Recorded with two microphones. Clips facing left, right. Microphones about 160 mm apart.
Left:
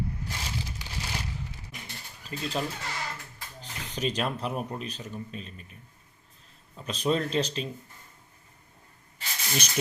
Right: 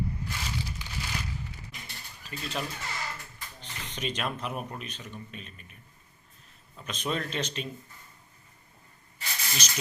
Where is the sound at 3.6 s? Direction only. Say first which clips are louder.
Left 5 dB; 35° left (ahead or behind).